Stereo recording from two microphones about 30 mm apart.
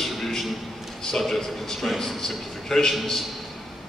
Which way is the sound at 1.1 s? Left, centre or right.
Centre.